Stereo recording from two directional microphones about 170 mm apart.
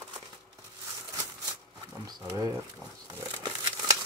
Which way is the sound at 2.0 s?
20° right (ahead or behind).